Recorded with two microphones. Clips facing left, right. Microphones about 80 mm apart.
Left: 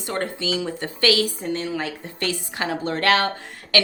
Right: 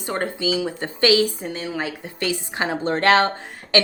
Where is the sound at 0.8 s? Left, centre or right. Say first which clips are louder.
Right 4 dB; right.